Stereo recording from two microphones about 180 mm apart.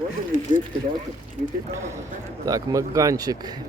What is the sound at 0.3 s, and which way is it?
Speech, 45° left (ahead or behind).